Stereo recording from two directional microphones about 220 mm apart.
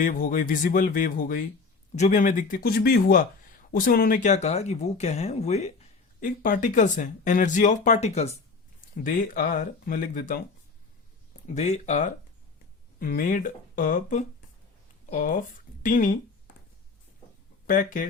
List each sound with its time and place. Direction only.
0.0 s speech: 40° left (ahead or behind)
9.0 s speech: 40° left (ahead or behind)
11.4 s speech: 30° left (ahead or behind)
17.7 s speech: 40° left (ahead or behind)